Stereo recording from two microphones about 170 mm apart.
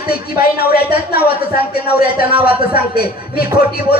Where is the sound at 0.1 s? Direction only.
65° left (ahead or behind).